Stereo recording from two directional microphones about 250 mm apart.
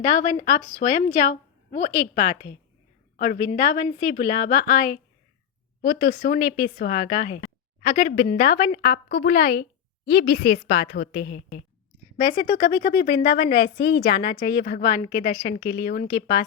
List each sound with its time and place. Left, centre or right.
0.8 s a woman's voice: left